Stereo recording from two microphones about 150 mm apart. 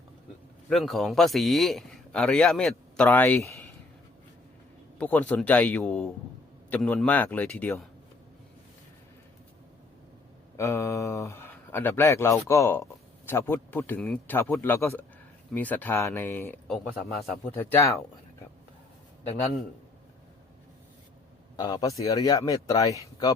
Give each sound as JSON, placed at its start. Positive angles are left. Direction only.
{"t": 0.7, "sound": "a man's voice", "side_deg": 0}
{"t": 4.9, "sound": "speech", "side_deg": 10}
{"t": 10.6, "sound": "speech", "side_deg": 20}
{"t": 16.6, "sound": "a man's voice", "side_deg": 0}
{"t": 17.5, "sound": "speech", "side_deg": 15}
{"t": 21.5, "sound": "speech", "side_deg": 25}